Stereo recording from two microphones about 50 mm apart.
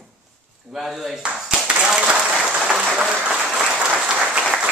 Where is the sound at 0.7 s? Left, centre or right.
Centre.